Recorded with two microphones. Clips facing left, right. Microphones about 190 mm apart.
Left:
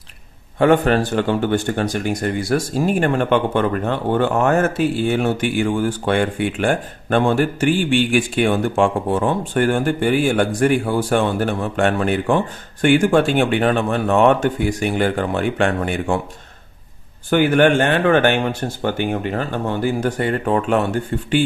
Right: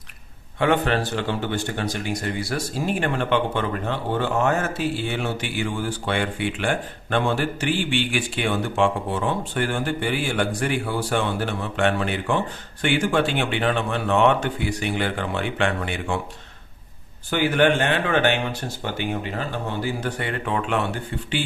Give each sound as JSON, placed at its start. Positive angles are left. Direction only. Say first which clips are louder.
{"t": 0.6, "sound": "speech", "louder": "left 6 dB", "side_deg": 45}
{"t": 17.3, "sound": "speech", "louder": "left 5 dB", "side_deg": 50}